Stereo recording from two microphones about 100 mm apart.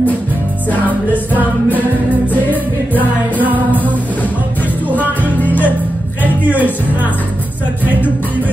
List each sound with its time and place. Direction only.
0.8 s music: 15° right (ahead or behind)
4.8 s music: 15° right (ahead or behind)
5.2 s music: 15° left (ahead or behind)
6.4 s music: 15° right (ahead or behind)